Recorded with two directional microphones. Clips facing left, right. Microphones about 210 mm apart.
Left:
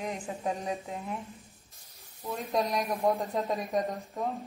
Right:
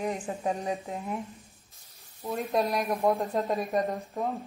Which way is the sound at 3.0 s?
Centre (ahead or behind).